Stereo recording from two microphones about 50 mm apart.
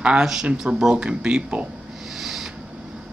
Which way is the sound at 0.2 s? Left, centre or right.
Centre.